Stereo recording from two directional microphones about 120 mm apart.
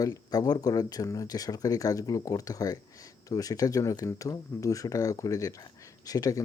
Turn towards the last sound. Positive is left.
turn(degrees=30)  # may be behind; listen again after turning